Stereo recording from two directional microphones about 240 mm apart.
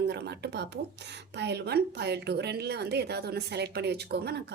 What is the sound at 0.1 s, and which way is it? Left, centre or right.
Speech, right.